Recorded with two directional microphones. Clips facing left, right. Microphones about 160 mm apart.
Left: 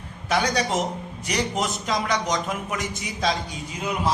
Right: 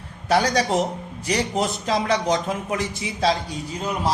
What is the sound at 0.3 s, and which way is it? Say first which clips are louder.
A man's voice: right 4 dB; 35° right (ahead or behind).